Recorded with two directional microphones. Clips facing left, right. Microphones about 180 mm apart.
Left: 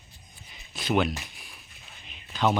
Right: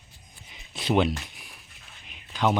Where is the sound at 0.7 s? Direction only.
30° right (ahead or behind).